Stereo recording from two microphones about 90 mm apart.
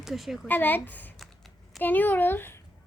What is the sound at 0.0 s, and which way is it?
Speech, 5° right (ahead or behind).